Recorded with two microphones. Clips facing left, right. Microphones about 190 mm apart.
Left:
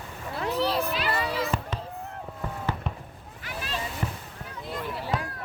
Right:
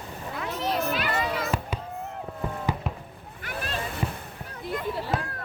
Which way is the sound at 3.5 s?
55° right (ahead or behind).